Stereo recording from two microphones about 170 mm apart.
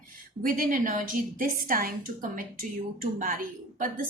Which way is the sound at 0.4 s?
55° right (ahead or behind).